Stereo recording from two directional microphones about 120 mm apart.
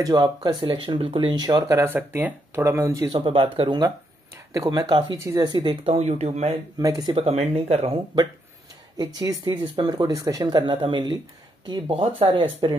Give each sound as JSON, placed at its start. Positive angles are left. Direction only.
{"t": 0.0, "sound": "speech", "side_deg": -35}
{"t": 3.1, "sound": "speech", "side_deg": -50}
{"t": 5.9, "sound": "speech", "side_deg": -65}
{"t": 6.8, "sound": "speech", "side_deg": -30}
{"t": 7.2, "sound": "speech", "side_deg": -55}
{"t": 8.9, "sound": "speech", "side_deg": -35}
{"t": 12.2, "sound": "speech", "side_deg": -50}